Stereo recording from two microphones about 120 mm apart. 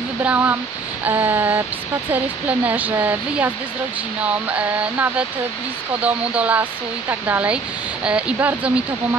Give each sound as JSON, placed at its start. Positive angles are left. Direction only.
{"t": 0.2, "sound": "speech", "side_deg": -15}